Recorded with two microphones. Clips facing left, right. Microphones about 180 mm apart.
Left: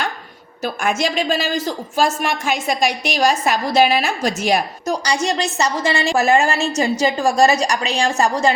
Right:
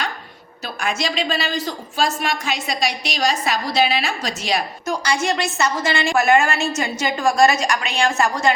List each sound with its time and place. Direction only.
0.6 s a woman's voice: 50° left (ahead or behind)
4.9 s a woman's voice: 35° left (ahead or behind)